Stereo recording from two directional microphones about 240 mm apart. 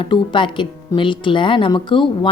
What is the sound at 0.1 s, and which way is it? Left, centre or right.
Speech, centre.